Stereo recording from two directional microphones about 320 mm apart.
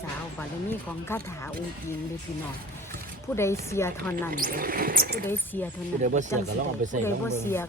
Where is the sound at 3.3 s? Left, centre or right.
Centre.